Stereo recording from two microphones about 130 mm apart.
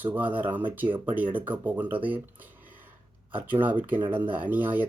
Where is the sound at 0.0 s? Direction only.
15° right (ahead or behind).